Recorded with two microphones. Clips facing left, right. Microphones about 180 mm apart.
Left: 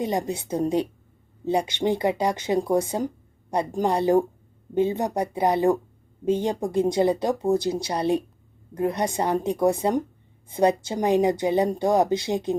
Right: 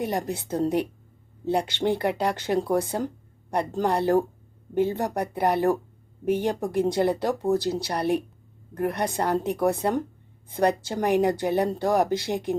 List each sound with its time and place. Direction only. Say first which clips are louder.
0.0 s speech: left 2 dB; 15° left (ahead or behind)